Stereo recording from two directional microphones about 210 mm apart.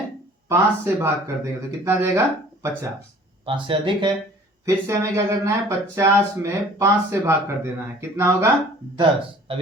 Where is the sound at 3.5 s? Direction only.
25° right (ahead or behind).